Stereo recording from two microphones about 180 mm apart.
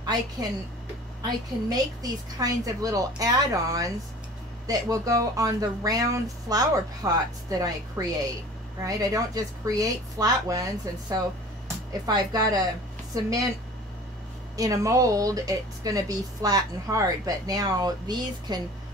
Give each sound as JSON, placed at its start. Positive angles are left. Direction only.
{"t": 0.0, "sound": "a woman's voice", "side_deg": -20}
{"t": 2.3, "sound": "speech", "side_deg": -20}
{"t": 14.6, "sound": "speech", "side_deg": -20}